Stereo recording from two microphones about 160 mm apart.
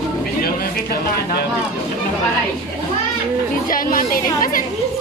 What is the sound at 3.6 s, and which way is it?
Speech, 60° left (ahead or behind).